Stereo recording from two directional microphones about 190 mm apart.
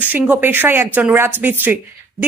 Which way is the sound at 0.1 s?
10° right (ahead or behind).